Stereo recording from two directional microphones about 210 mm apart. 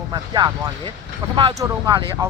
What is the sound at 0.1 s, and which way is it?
Speech, 20° right (ahead or behind).